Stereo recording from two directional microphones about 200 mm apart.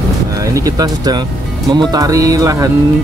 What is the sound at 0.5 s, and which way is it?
Speech, 20° right (ahead or behind).